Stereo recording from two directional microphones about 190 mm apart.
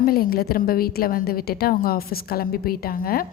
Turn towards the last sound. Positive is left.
turn(degrees=50)  # may be behind; listen again after turning